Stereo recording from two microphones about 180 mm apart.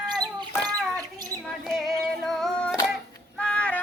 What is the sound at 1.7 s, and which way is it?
Music, centre (ahead or behind).